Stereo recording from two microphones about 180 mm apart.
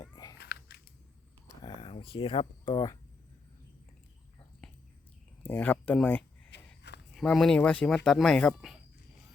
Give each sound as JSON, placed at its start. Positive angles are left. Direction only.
{"t": 0.0, "sound": "biting", "side_deg": 20}
{"t": 0.3, "sound": "biting", "side_deg": 65}
{"t": 1.6, "sound": "speech", "side_deg": 30}
{"t": 4.6, "sound": "a sound", "side_deg": 5}
{"t": 5.4, "sound": "speech", "side_deg": 10}